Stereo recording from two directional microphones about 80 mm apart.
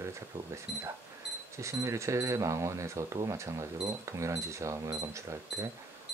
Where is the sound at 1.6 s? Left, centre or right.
Right.